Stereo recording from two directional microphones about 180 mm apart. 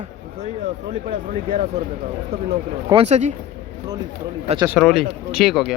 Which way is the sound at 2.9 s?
40° right (ahead or behind).